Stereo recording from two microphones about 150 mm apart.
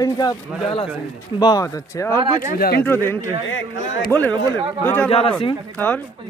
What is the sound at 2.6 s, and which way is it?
Speech, 90° left.